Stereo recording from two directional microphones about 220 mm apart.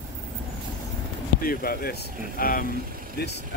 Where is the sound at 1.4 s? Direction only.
40° left (ahead or behind).